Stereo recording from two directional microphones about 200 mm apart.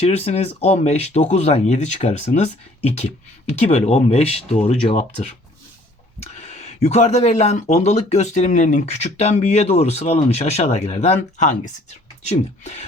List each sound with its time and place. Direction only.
0.0 s speech: 35° left (ahead or behind)